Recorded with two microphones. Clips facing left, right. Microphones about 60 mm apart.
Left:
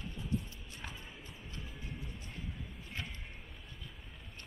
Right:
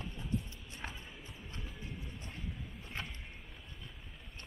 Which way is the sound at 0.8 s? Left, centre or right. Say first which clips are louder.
Right 3 dB; right.